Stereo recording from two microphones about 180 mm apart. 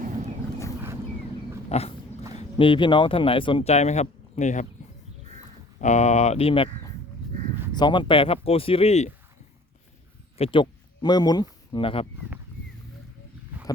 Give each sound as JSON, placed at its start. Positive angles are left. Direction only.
{"t": 1.7, "sound": "speech", "side_deg": 35}
{"t": 5.8, "sound": "speech", "side_deg": 40}
{"t": 7.8, "sound": "speech", "side_deg": 25}
{"t": 10.3, "sound": "speech", "side_deg": 30}